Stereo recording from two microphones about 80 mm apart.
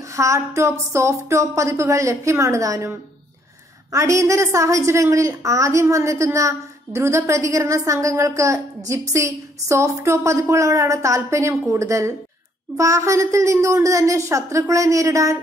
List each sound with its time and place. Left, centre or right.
0.1 s a woman's voice: right
3.9 s a woman's voice: right